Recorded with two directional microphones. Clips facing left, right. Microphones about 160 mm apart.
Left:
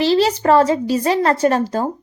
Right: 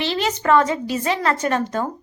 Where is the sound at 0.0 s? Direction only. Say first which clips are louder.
Left 7 dB; 35° left (ahead or behind).